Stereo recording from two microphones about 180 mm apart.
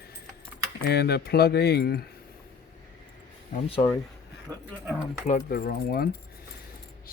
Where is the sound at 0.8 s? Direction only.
60° left (ahead or behind).